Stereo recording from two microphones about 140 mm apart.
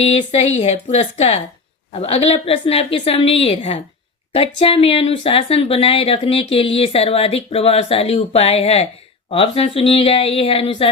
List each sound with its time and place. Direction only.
0.0 s speech: 50° left (ahead or behind)